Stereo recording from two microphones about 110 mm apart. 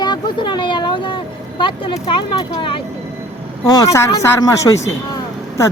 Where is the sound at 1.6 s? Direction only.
45° left (ahead or behind).